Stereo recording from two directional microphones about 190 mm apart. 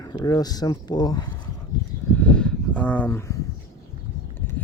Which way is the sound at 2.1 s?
5° left (ahead or behind).